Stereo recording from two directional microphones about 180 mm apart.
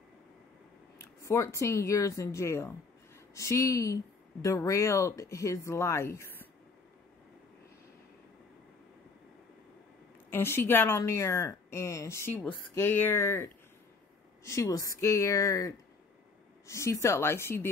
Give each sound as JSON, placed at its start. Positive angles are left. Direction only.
{"t": 0.9, "sound": "speech", "side_deg": 15}
{"t": 10.3, "sound": "speech", "side_deg": 10}